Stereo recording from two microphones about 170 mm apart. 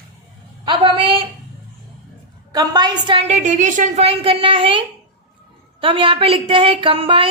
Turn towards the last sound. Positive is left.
turn(degrees=-30)  # may be behind; listen again after turning